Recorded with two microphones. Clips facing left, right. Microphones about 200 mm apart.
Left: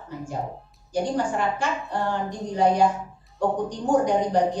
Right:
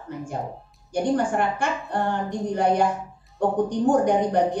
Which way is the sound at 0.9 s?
55° right (ahead or behind).